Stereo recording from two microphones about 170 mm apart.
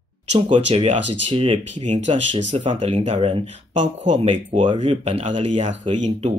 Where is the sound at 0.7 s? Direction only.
35° right (ahead or behind).